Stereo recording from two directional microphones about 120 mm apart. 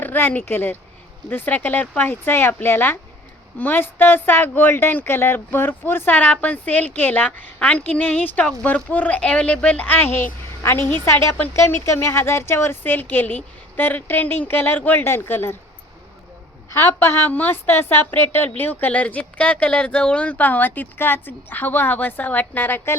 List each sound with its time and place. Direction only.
0.0 s a woman's voice: 15° left (ahead or behind)
16.7 s a woman's voice: 20° left (ahead or behind)